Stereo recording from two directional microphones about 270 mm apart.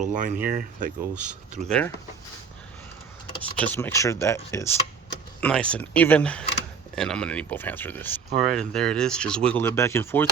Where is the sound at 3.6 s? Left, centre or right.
Centre.